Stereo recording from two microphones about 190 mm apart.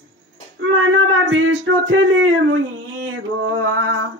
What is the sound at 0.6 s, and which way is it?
Speech, 90° right.